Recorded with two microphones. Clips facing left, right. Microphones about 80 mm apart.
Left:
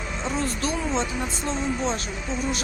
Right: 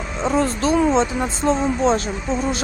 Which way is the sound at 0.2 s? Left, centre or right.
Right.